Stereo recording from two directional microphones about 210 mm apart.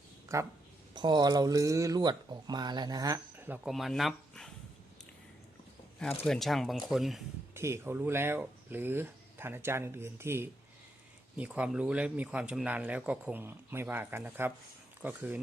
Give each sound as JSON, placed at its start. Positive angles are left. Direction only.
{"t": 0.3, "sound": "speech", "side_deg": -15}
{"t": 6.0, "sound": "speech", "side_deg": 5}
{"t": 7.5, "sound": "speech", "side_deg": -10}